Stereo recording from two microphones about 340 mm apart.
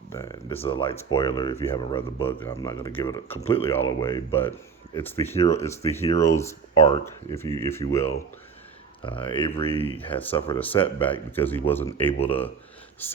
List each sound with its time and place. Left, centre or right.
0.1 s speech: centre
10.0 s speech: centre
10.3 s speech: centre